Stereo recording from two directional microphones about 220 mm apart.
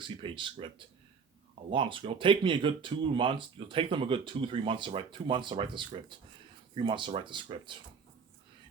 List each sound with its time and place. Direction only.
0.0 s speech: 20° right (ahead or behind)